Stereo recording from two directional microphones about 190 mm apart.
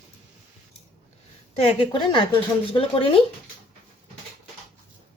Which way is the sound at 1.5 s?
30° left (ahead or behind).